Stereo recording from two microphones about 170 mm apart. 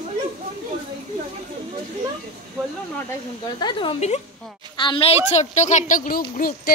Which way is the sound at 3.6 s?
30° left (ahead or behind).